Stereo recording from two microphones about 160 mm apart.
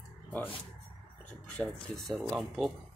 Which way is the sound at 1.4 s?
5° left (ahead or behind).